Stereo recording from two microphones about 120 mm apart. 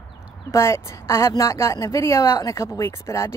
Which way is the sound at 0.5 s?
25° left (ahead or behind).